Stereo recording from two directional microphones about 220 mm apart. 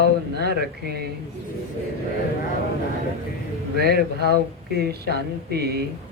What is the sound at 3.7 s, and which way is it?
Speech, 45° right (ahead or behind).